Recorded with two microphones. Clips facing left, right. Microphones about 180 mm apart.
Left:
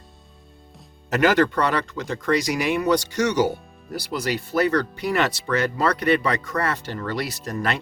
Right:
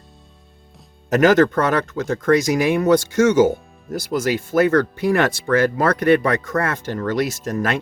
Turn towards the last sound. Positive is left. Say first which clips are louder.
# right 4 dB
turn(degrees=-45)  # may be behind; listen again after turning